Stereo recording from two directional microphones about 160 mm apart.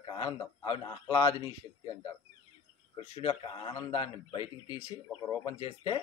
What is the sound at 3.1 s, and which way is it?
Speech, 35° left (ahead or behind).